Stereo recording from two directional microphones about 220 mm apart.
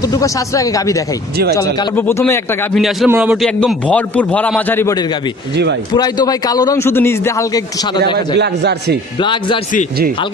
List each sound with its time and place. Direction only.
0.1 s a man's voice: 15° left (ahead or behind)
3.1 s a man's voice: 5° right (ahead or behind)
5.9 s a man's voice: 15° left (ahead or behind)
8.4 s a man's voice: 50° right (ahead or behind)
9.2 s a man's voice: 20° left (ahead or behind)